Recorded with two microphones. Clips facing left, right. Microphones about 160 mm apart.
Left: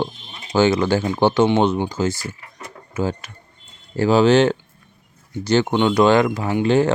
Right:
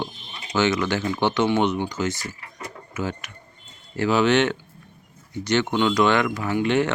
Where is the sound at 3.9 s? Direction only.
35° left (ahead or behind).